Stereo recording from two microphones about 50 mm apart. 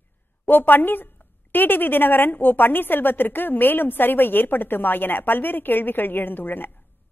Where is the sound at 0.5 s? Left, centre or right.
Left.